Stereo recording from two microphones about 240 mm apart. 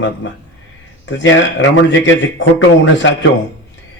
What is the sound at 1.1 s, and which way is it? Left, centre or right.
A man's voice, left.